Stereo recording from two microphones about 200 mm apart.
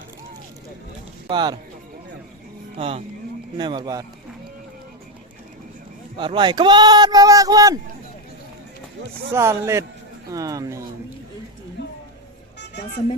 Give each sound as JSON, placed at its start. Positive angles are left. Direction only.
{"t": 1.3, "sound": "speech", "side_deg": -20}
{"t": 2.7, "sound": "speech", "side_deg": -30}
{"t": 6.1, "sound": "speech", "side_deg": -25}
{"t": 9.3, "sound": "speech", "side_deg": -15}